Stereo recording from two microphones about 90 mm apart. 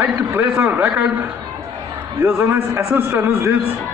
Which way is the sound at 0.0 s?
20° right (ahead or behind).